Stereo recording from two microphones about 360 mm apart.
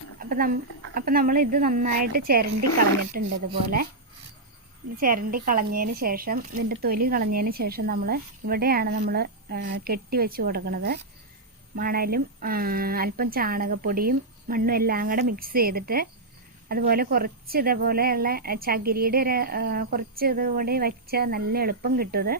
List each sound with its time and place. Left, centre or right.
0.2 s a woman's voice: right
4.9 s a woman's voice: right